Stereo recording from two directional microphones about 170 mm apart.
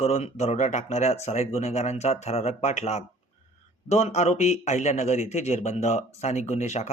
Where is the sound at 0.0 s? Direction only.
40° left (ahead or behind).